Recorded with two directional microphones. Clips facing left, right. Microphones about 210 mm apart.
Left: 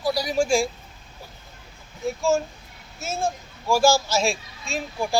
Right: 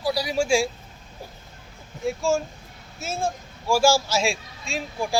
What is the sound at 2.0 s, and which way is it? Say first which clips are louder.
Speech: left 1 dB; 10° right (ahead or behind).